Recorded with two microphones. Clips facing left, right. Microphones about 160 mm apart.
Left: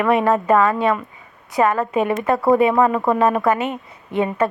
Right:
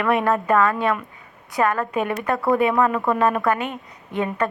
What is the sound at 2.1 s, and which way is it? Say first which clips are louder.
Speech: left 5 dB; 25° left (ahead or behind).